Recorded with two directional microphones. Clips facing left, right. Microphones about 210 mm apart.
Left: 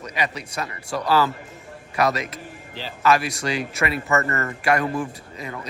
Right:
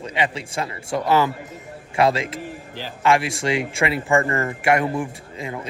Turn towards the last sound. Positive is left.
turn(degrees=-25)  # may be behind; listen again after turning